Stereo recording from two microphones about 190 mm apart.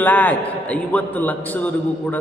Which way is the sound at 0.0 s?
10° left (ahead or behind).